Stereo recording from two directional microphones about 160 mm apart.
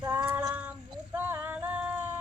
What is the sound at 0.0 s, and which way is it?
Female singing, 10° right (ahead or behind).